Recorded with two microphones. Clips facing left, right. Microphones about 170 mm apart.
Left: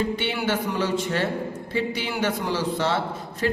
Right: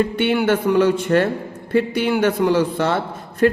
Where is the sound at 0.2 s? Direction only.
55° right (ahead or behind).